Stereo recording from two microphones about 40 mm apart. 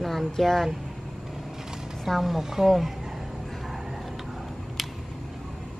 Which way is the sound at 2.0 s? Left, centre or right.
Centre.